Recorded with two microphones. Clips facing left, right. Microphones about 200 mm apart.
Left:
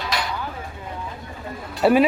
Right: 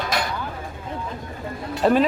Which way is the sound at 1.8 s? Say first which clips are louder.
Left 2 dB; 10° left (ahead or behind).